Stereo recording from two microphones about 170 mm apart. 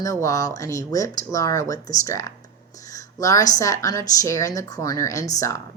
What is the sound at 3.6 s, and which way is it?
A woman's voice, 20° left (ahead or behind).